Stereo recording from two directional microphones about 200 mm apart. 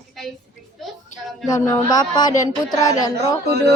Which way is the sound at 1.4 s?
15° left (ahead or behind).